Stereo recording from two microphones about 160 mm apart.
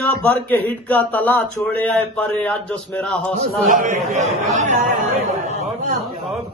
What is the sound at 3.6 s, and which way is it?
A man's voice, 55° right (ahead or behind).